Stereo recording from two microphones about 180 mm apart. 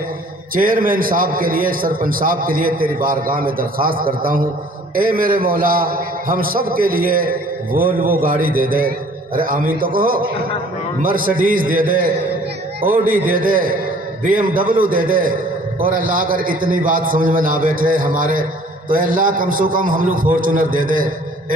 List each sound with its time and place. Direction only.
0.6 s a man's voice: 50° right (ahead or behind)